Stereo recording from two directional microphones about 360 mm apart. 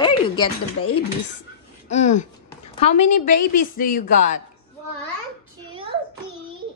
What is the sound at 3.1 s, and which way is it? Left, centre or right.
Speech, left.